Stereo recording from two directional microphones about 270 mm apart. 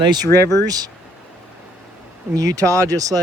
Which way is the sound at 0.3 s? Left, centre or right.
Centre.